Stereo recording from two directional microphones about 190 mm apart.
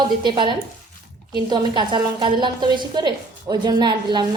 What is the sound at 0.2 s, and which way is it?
A woman's voice, 25° right (ahead or behind).